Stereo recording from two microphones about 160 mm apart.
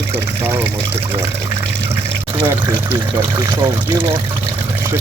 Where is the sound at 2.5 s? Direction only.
30° right (ahead or behind).